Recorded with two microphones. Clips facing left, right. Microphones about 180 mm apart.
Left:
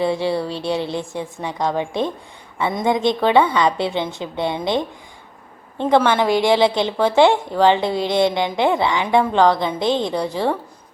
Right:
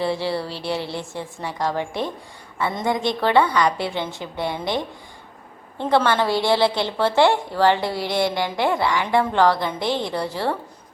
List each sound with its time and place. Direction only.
0.0 s a woman's voice: 20° left (ahead or behind)